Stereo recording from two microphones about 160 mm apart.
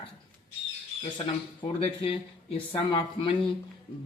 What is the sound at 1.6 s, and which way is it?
Speech, 30° left (ahead or behind).